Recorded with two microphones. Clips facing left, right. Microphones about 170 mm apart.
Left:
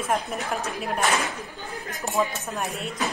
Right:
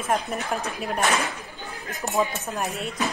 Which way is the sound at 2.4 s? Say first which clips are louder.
Right 1 dB; centre (ahead or behind).